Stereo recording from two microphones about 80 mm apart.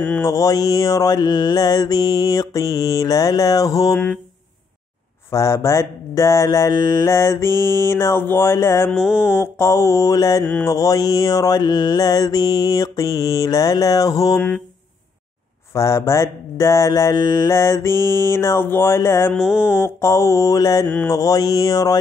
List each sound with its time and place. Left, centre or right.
0.2 s mantra: left
5.3 s speech: left
6.7 s mantra: left
7.2 s speech: left
8.9 s mantra: centre
9.3 s speech: left
10.6 s mantra: left
15.7 s speech: left
19.3 s mantra: centre
19.8 s speech: left
20.8 s a sound: centre
21.1 s mantra: left